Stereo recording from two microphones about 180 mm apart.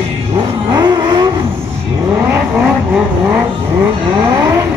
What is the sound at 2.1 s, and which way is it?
Vehicle, 10° right (ahead or behind).